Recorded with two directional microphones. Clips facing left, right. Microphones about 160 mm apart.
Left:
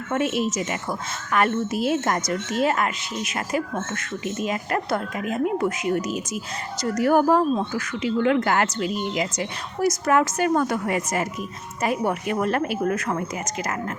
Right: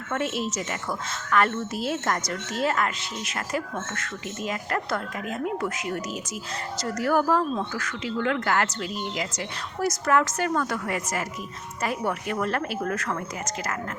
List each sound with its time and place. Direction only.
0.1 s a woman's voice: 15° left (ahead or behind)